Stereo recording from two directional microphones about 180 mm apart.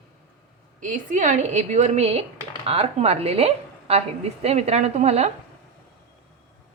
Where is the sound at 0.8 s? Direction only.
45° right (ahead or behind).